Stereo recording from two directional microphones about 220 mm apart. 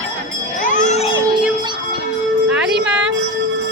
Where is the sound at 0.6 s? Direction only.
35° left (ahead or behind).